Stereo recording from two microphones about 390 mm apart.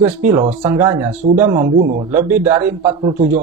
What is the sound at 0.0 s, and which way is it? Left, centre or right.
A man's voice, centre.